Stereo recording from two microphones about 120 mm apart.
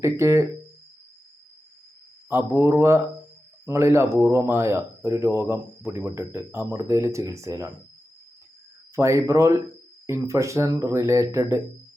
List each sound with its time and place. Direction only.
0.0 s speech: 25° right (ahead or behind)
2.3 s speech: 20° right (ahead or behind)
9.0 s speech: 25° right (ahead or behind)